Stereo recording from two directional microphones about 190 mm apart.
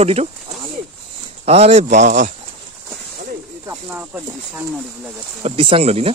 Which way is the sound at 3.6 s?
10° right (ahead or behind).